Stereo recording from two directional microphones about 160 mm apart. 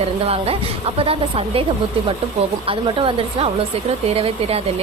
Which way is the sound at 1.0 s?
35° right (ahead or behind).